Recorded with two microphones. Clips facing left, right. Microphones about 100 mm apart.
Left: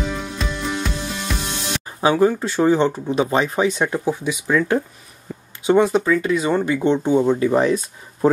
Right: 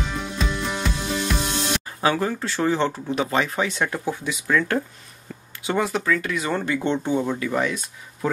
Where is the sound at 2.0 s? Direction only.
20° left (ahead or behind).